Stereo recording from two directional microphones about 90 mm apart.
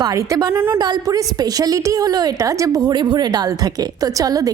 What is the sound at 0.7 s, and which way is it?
A woman's voice, 45° right (ahead or behind).